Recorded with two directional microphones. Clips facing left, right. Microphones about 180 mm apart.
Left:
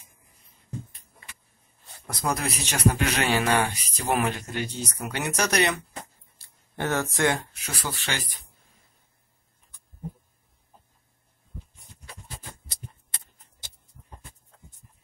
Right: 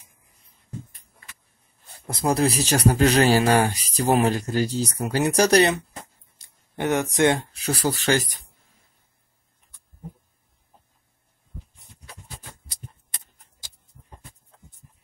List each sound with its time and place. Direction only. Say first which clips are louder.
2.0 s speech: right 7 dB; 30° right (ahead or behind)
6.3 s a sound: right 2 dB; 15° right (ahead or behind)
7.5 s speech: right 10 dB; 35° right (ahead or behind)